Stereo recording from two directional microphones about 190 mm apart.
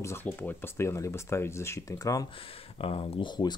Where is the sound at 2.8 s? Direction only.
30° left (ahead or behind).